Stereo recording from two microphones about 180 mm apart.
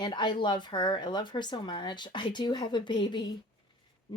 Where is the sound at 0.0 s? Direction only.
25° left (ahead or behind).